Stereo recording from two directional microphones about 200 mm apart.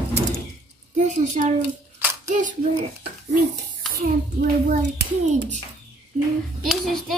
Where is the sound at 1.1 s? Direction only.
40° right (ahead or behind).